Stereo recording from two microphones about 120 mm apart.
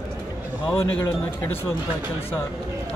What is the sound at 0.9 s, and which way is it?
Speech, 20° left (ahead or behind).